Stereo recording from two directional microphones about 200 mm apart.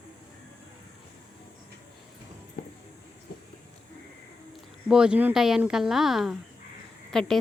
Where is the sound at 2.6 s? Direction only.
55° left (ahead or behind).